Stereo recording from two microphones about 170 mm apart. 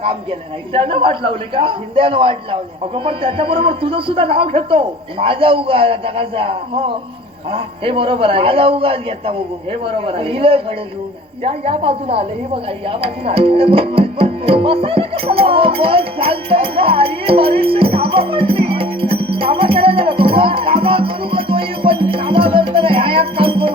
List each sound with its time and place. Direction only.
0.0 s a man's voice: 35° right (ahead or behind)
12.9 s music: 35° right (ahead or behind)